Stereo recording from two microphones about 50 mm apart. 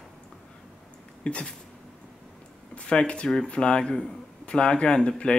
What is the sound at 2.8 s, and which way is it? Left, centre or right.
Speech, left.